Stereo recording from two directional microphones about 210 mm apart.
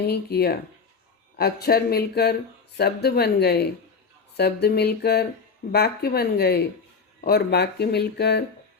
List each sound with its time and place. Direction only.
0.1 s speech: 50° left (ahead or behind)